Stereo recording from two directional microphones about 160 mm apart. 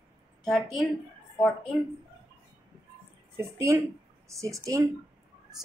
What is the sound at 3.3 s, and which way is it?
Speech, 20° right (ahead or behind).